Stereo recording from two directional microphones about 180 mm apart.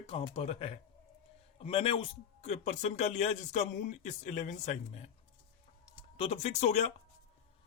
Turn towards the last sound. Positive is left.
turn(degrees=40)  # may be behind; listen again after turning